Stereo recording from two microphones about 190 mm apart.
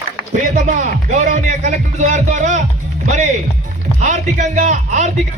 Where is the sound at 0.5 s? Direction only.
40° right (ahead or behind).